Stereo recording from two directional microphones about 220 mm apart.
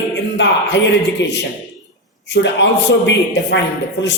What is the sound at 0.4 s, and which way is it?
Speech, 55° left (ahead or behind).